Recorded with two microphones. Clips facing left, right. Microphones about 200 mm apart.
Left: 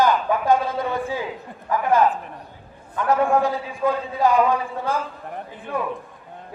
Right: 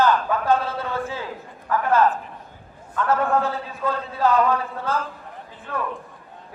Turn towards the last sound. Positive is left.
turn(degrees=15)  # may be behind; listen again after turning